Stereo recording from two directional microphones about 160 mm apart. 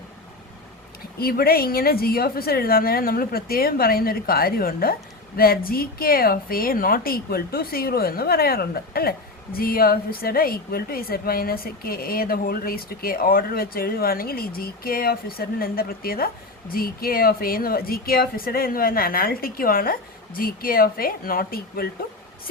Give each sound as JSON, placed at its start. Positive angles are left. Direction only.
{"t": 1.2, "sound": "a woman's voice", "side_deg": 70}